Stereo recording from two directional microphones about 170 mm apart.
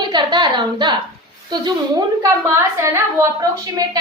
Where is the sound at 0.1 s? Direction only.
25° right (ahead or behind).